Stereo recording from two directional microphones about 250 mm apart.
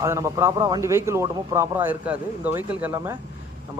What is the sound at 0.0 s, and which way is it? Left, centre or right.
Speech, centre.